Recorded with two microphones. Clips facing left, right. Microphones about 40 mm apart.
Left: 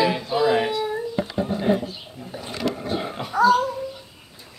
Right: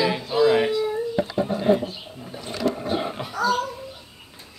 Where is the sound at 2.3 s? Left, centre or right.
Centre.